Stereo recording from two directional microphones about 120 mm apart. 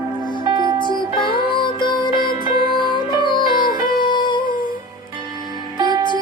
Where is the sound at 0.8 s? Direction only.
40° left (ahead or behind).